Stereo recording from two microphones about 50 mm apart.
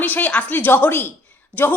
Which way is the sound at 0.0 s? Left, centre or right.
Left.